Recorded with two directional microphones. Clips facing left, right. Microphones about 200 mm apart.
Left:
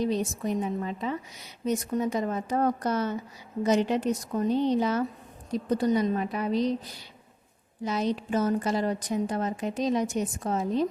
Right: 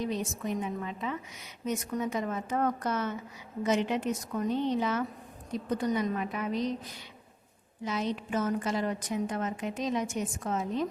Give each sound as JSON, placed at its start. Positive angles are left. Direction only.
{"t": 0.0, "sound": "a woman's voice", "side_deg": 35}